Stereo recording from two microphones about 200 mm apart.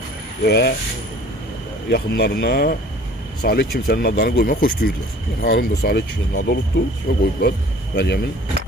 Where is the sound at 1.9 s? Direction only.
55° left (ahead or behind).